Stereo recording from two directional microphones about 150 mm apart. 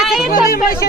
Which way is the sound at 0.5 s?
85° left.